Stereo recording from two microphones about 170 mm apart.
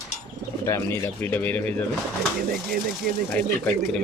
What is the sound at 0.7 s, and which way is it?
Speech, 15° left (ahead or behind).